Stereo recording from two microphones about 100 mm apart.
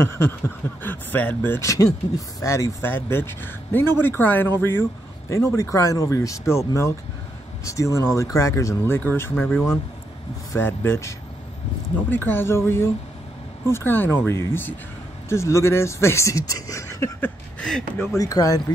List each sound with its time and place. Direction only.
0.8 s speech: 15° left (ahead or behind)
2.1 s speech: 30° left (ahead or behind)
17.2 s a sound: 10° left (ahead or behind)
18.1 s speech: 35° left (ahead or behind)